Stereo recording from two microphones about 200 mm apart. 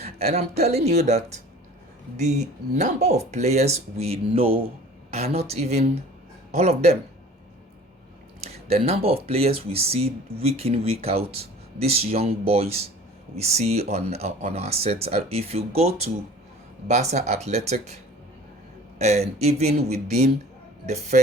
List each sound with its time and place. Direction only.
0.0 s speech: 30° right (ahead or behind)
8.7 s speech: 30° right (ahead or behind)
18.9 s speech: 35° right (ahead or behind)